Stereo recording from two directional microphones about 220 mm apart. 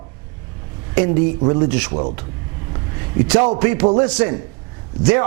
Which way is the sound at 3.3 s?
25° right (ahead or behind).